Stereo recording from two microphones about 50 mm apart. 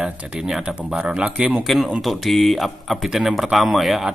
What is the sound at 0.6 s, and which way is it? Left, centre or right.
Speech, centre.